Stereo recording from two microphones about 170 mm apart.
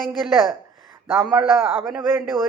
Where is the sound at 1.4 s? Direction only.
30° right (ahead or behind).